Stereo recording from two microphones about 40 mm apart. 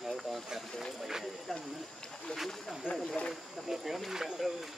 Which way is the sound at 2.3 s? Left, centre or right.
Left.